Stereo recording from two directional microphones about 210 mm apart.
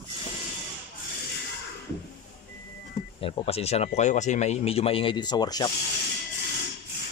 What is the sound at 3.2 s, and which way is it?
Speech, 25° left (ahead or behind).